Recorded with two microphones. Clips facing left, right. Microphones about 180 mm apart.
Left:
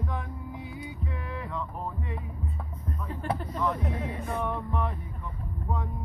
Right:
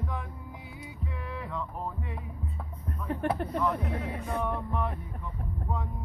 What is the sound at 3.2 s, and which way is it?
Speech, 65° right (ahead or behind).